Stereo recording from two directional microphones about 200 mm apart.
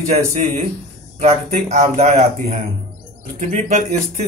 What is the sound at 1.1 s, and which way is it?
Speech, 35° right (ahead or behind).